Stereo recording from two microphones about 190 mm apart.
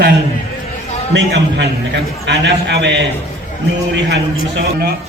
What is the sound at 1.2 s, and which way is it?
A man's voice, 65° right (ahead or behind).